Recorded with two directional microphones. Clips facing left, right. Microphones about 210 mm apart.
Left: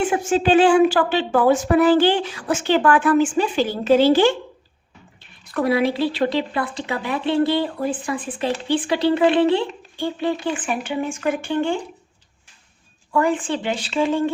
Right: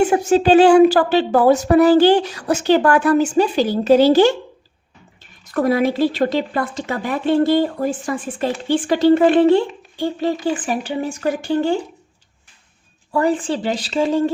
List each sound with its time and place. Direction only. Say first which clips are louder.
0.0 s a woman's voice: right 5 dB; 40° right (ahead or behind)
13.1 s a woman's voice: right 2 dB; 35° right (ahead or behind)